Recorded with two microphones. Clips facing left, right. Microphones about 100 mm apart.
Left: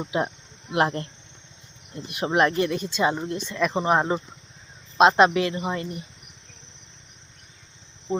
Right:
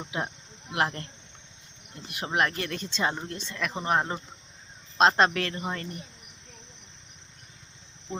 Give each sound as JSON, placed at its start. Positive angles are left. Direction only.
{"t": 0.1, "sound": "speech", "side_deg": 25}
{"t": 2.0, "sound": "speech", "side_deg": 20}
{"t": 2.6, "sound": "speech", "side_deg": 10}
{"t": 4.9, "sound": "speech", "side_deg": 10}